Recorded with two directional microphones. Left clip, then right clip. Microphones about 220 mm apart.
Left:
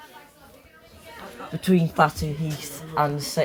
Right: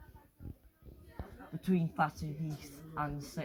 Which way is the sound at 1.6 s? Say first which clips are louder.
Left 13 dB; 10° left (ahead or behind).